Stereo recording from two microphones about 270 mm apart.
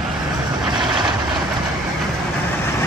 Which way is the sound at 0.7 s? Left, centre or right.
Centre.